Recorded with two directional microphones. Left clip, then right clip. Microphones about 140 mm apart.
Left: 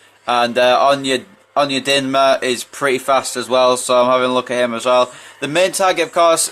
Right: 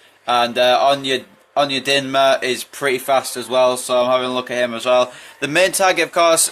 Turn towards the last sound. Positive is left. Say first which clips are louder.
# left 1 dB
turn(degrees=15)  # may be behind; listen again after turning